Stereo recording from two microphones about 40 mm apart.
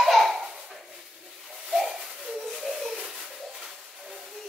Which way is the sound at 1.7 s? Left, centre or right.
Centre.